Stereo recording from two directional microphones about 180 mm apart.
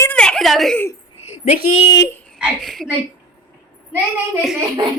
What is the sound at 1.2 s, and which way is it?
Speech, 35° left (ahead or behind).